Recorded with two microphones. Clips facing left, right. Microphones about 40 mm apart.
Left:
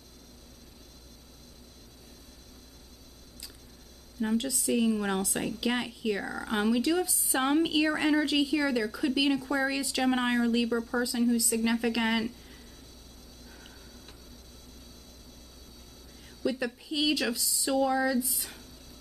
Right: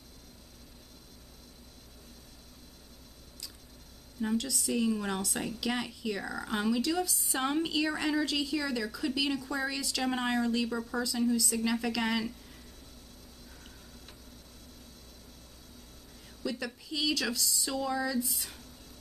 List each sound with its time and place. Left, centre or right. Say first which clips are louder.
4.2 s a woman's voice: left 2 dB; centre
16.4 s a woman's voice: left 5 dB; centre